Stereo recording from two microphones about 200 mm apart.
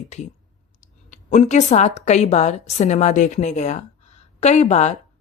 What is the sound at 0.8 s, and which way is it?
A woman's voice, 35° left (ahead or behind).